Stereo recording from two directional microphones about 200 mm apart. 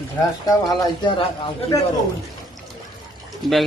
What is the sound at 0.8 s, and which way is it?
Speech, 25° left (ahead or behind).